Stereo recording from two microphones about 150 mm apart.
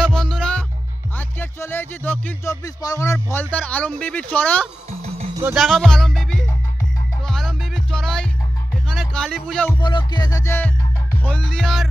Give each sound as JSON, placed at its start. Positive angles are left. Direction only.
{"t": 0.0, "sound": "music", "side_deg": 5}
{"t": 2.5, "sound": "speech", "side_deg": 25}
{"t": 5.0, "sound": "music", "side_deg": -40}
{"t": 5.5, "sound": "music", "side_deg": 0}
{"t": 9.8, "sound": "music", "side_deg": 30}
{"t": 10.4, "sound": "speech", "side_deg": 15}
{"t": 11.2, "sound": "music", "side_deg": 5}